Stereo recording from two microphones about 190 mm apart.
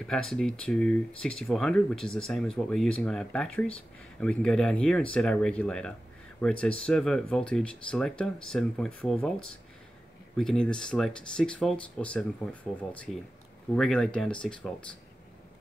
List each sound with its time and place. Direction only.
0.0 s speech: centre (ahead or behind)